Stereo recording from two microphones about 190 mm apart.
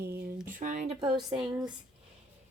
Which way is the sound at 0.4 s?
45° right (ahead or behind).